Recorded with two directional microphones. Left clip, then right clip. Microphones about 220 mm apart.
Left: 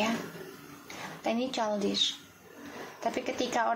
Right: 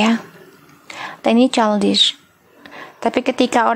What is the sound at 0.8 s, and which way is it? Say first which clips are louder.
Speech: right 14 dB; 45° right (ahead or behind).